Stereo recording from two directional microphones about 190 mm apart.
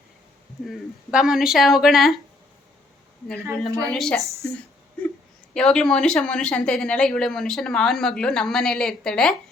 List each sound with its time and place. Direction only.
0.6 s speech: centre (ahead or behind)
3.7 s a woman's voice: 20° right (ahead or behind)
3.9 s speech: 5° left (ahead or behind)
5.5 s speech: 5° left (ahead or behind)